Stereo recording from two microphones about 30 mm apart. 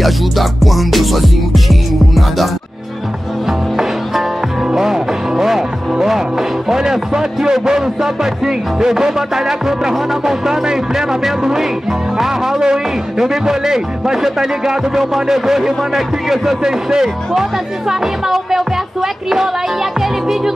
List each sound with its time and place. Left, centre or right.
0.0 s music: centre
3.4 s music: centre
6.8 s speech: centre